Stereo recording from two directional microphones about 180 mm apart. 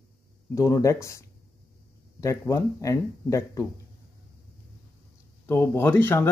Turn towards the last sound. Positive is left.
turn(degrees=10)  # may be behind; listen again after turning